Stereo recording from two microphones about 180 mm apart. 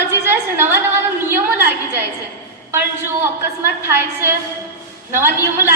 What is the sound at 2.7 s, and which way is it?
A woman's voice, 10° right (ahead or behind).